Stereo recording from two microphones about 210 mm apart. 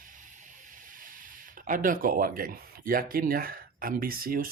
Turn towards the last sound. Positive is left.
turn(degrees=-45)  # may be behind; listen again after turning